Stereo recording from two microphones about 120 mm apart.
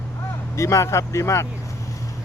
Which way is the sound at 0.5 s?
25° left (ahead or behind).